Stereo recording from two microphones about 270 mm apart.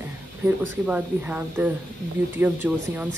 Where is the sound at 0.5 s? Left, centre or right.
Centre.